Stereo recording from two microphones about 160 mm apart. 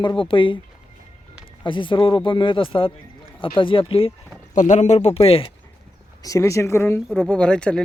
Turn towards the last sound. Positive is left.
turn(degrees=5)  # may be behind; listen again after turning